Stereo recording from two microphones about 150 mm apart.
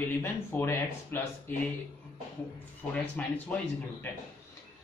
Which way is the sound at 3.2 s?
10° left (ahead or behind).